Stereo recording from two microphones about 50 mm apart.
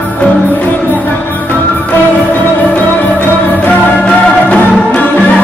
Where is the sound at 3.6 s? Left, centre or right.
Left.